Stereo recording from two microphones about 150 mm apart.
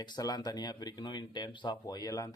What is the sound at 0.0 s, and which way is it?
Speech, 30° left (ahead or behind).